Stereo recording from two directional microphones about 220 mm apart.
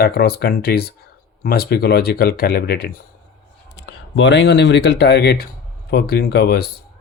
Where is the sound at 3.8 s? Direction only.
55° left (ahead or behind).